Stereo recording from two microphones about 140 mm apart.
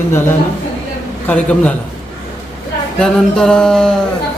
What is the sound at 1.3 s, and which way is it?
Speech, 10° left (ahead or behind).